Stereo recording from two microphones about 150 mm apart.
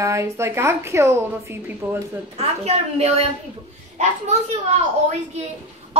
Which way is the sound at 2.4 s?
45° right (ahead or behind).